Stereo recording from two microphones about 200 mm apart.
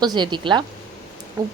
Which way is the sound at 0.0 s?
20° right (ahead or behind).